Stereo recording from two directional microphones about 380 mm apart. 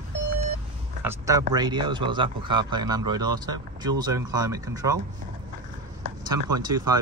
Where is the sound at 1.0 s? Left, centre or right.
Centre.